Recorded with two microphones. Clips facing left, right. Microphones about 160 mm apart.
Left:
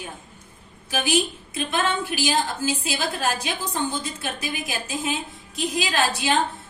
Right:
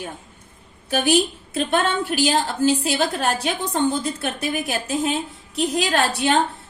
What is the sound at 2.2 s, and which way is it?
A woman's voice, 65° right (ahead or behind).